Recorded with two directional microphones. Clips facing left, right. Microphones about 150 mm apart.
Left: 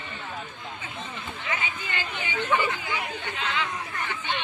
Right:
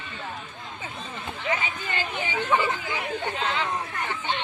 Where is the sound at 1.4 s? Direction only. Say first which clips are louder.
Right 4 dB; 35° right (ahead or behind).